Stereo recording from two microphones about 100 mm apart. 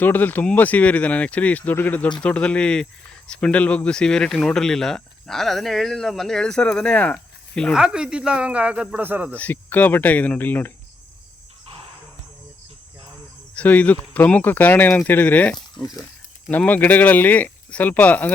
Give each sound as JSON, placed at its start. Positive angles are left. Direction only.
{"t": 0.0, "sound": "speech", "side_deg": 20}
{"t": 7.7, "sound": "speech", "side_deg": -5}
{"t": 9.3, "sound": "speech", "side_deg": 15}
{"t": 13.6, "sound": "speech", "side_deg": 15}
{"t": 15.8, "sound": "speech", "side_deg": 0}
{"t": 16.5, "sound": "speech", "side_deg": 15}